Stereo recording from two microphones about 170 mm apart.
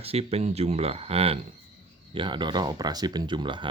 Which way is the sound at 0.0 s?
35° right (ahead or behind).